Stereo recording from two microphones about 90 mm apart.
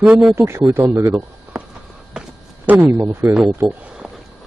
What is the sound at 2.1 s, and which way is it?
Walk, 15° right (ahead or behind).